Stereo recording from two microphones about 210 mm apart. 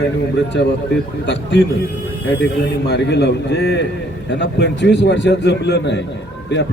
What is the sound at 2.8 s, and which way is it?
A man's voice, 55° left (ahead or behind).